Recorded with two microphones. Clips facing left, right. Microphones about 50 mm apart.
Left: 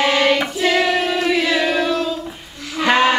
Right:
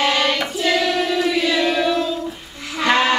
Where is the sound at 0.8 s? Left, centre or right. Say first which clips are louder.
Left 3 dB; left.